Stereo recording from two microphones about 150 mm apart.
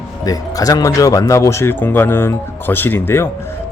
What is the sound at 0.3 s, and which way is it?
Speech, 25° left (ahead or behind).